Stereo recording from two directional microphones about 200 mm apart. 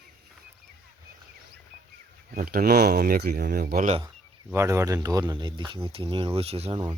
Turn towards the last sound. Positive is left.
turn(degrees=-25)  # may be behind; listen again after turning